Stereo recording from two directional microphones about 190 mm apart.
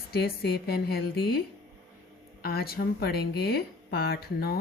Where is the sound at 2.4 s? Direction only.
55° left (ahead or behind).